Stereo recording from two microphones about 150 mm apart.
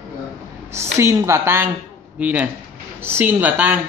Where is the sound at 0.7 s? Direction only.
20° right (ahead or behind).